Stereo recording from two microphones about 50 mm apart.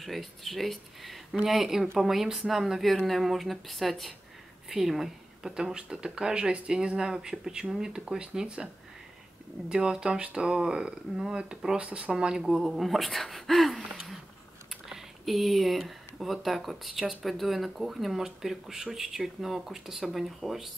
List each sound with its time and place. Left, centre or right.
0.0 s speech: centre
9.7 s speech: centre